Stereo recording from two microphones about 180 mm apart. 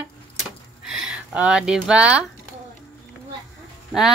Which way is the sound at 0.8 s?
5° right (ahead or behind).